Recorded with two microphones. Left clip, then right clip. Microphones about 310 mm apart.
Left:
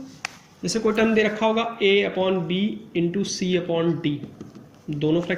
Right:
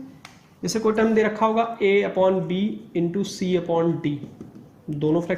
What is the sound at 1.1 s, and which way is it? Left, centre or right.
Speech, right.